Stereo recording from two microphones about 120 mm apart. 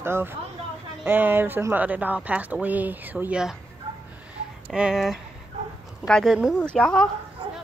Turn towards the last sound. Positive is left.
turn(degrees=5)  # may be behind; listen again after turning